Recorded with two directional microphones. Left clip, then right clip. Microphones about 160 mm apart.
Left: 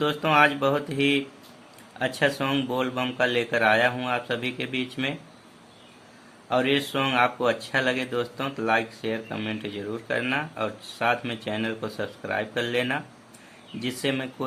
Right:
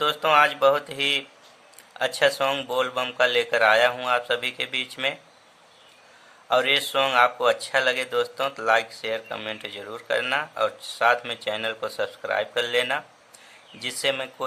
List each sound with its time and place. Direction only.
0.0 s speech: 30° right (ahead or behind)
6.5 s speech: 30° right (ahead or behind)